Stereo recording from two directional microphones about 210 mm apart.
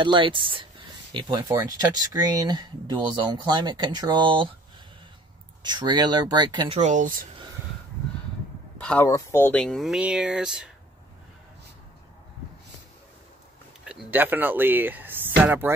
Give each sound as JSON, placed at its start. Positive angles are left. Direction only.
{"t": 0.0, "sound": "speech", "side_deg": -25}
{"t": 5.6, "sound": "speech", "side_deg": -20}
{"t": 6.7, "sound": "speech", "side_deg": -35}
{"t": 8.7, "sound": "speech", "side_deg": 5}
{"t": 13.8, "sound": "speech", "side_deg": -5}